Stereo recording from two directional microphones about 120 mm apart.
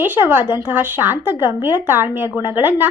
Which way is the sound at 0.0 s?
15° right (ahead or behind).